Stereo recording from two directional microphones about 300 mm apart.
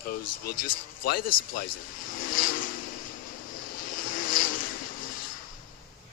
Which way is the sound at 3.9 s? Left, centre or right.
Left.